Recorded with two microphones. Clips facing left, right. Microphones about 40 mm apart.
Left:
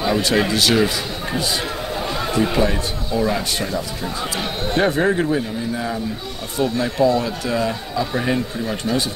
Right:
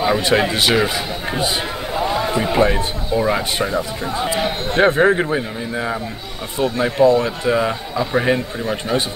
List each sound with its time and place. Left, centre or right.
0.0 s speech: right
0.8 s a sound: right
2.1 s speech: centre